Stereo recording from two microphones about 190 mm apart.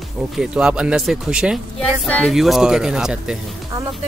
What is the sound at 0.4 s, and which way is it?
Speech, 5° right (ahead or behind).